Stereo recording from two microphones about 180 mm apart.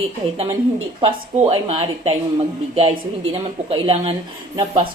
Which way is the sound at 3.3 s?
30° right (ahead or behind).